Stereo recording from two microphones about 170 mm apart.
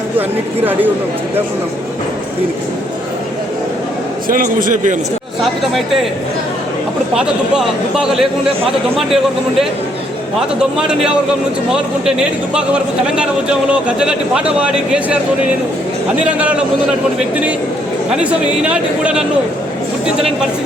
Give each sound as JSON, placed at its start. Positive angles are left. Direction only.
{"t": 0.2, "sound": "a man's voice", "side_deg": -10}
{"t": 4.3, "sound": "a man's voice", "side_deg": -55}
{"t": 5.7, "sound": "speech", "side_deg": 0}
{"t": 7.1, "sound": "speech", "side_deg": -5}
{"t": 12.5, "sound": "a man's voice", "side_deg": -5}
{"t": 16.2, "sound": "a man's voice", "side_deg": -10}
{"t": 18.1, "sound": "a man's voice", "side_deg": -5}